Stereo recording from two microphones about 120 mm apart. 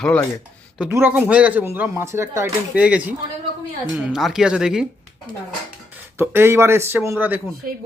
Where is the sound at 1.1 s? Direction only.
10° right (ahead or behind).